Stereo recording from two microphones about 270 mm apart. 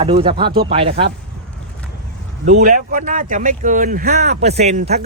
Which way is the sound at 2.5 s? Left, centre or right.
Right.